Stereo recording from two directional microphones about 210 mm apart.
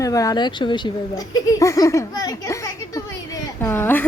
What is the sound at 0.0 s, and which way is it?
Speech, 15° left (ahead or behind).